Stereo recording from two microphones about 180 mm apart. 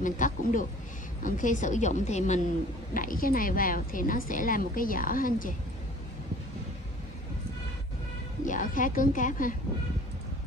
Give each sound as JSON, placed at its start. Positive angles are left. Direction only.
{"t": 0.0, "sound": "a woman's voice", "side_deg": 45}
{"t": 8.5, "sound": "a woman's voice", "side_deg": 45}